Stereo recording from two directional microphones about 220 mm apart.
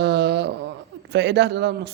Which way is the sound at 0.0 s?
50° right (ahead or behind).